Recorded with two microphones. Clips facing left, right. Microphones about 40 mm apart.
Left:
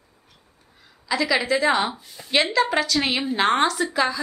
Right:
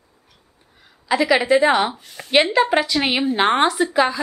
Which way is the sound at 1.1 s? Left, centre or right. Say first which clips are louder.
Right 5 dB; right.